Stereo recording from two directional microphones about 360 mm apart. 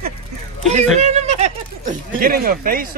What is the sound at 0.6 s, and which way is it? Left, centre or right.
Speech, centre.